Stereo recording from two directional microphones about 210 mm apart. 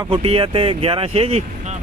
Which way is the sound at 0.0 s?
25° right (ahead or behind).